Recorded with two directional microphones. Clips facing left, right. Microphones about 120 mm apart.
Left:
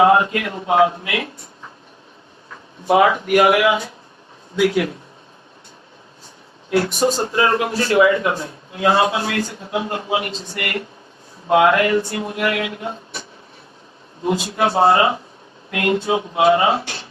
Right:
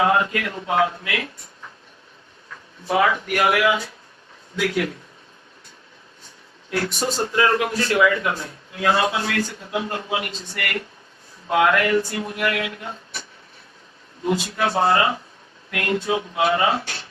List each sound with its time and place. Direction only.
0.0 s speech: 25° left (ahead or behind)
2.8 s speech: 20° left (ahead or behind)
6.7 s speech: 25° left (ahead or behind)
14.3 s speech: 30° left (ahead or behind)